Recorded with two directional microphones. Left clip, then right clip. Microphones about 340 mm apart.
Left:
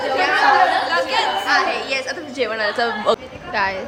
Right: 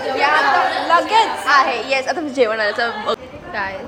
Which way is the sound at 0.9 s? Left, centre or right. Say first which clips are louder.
Right 5 dB; centre.